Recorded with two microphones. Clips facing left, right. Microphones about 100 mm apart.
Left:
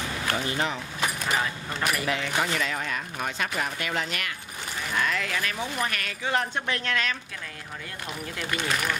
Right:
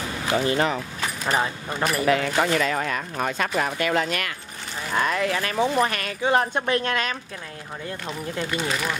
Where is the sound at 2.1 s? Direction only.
50° right (ahead or behind).